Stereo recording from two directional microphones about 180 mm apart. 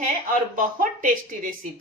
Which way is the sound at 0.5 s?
50° right (ahead or behind).